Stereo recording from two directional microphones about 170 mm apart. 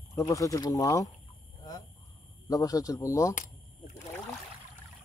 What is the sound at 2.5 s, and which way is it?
Speech, 20° left (ahead or behind).